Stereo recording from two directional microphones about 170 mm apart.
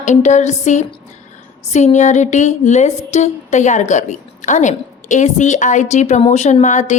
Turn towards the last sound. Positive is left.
turn(degrees=45)  # may be behind; listen again after turning